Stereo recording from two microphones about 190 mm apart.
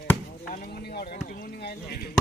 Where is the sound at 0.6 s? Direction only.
55° left (ahead or behind).